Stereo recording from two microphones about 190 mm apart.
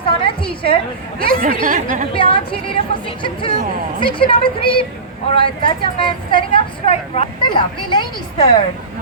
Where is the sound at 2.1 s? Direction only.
25° left (ahead or behind).